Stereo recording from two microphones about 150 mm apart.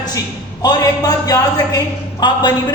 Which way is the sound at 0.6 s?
25° left (ahead or behind).